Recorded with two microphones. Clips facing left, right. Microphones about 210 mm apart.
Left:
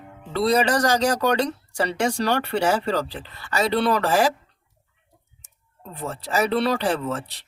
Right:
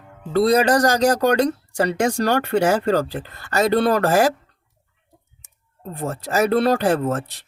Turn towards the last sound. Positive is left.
turn(degrees=-45)  # may be behind; listen again after turning